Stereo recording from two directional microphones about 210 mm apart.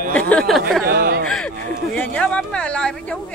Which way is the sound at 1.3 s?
5° left (ahead or behind).